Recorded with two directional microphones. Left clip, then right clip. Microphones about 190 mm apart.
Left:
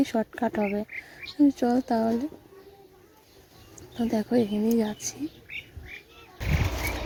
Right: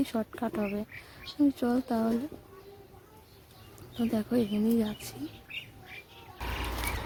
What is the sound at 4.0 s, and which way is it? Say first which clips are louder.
Speech: left 5 dB; 20° left (ahead or behind).